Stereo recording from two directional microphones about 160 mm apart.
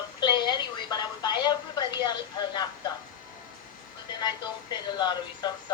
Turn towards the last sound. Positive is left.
turn(degrees=25)  # may be behind; listen again after turning